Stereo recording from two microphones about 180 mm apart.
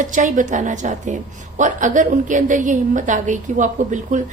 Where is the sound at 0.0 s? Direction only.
45° right (ahead or behind).